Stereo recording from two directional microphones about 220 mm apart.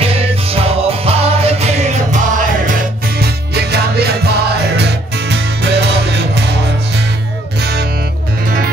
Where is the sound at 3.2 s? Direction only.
45° right (ahead or behind).